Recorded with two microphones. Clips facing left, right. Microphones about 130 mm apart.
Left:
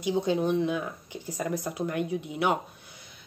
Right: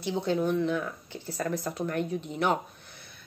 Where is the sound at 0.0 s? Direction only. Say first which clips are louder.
Left 2 dB; 15° left (ahead or behind).